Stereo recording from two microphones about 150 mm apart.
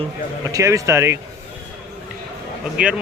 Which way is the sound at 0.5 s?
20° right (ahead or behind).